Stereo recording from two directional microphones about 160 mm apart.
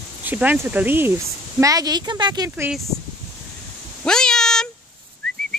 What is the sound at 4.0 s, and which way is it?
Cat, 5° left (ahead or behind).